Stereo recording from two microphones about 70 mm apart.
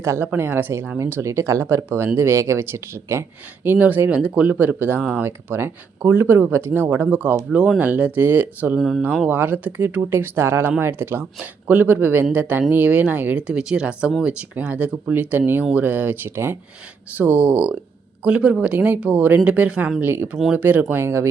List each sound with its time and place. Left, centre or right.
0.2 s speech: right
4.5 s speech: right
20.8 s speech: right